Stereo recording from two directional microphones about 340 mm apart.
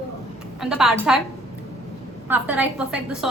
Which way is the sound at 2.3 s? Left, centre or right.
Centre.